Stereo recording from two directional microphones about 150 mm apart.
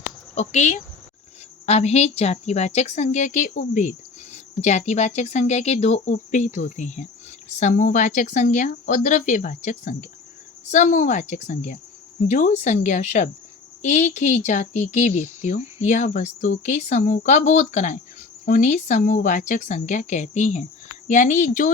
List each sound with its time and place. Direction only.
0.3 s a woman's voice: 50° left (ahead or behind)